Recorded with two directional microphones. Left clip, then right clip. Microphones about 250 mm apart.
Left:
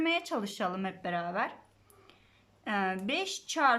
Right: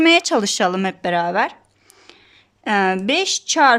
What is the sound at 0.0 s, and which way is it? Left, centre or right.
A woman's voice, right.